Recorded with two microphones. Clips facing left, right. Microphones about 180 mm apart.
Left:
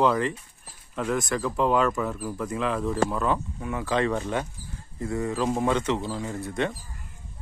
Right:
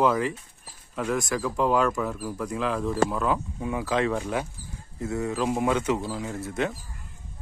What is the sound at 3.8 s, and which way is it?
Speech, centre (ahead or behind).